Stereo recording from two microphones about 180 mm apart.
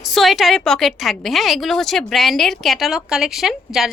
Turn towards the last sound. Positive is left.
turn(degrees=0)  # may be behind; listen again after turning